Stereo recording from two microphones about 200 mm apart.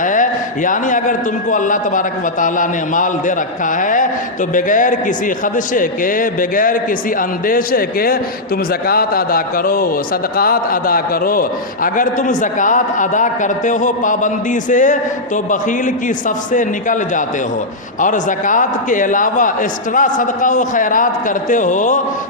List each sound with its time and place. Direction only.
0.0 s a man's voice: 40° left (ahead or behind)
16.0 s a man's voice: 40° left (ahead or behind)